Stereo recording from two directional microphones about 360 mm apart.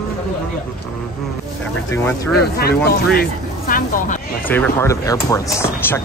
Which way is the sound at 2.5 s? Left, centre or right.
Left.